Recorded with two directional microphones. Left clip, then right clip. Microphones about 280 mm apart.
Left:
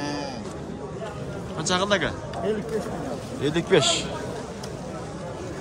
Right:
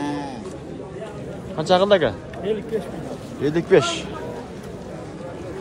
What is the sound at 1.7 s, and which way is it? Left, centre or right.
Speech, centre.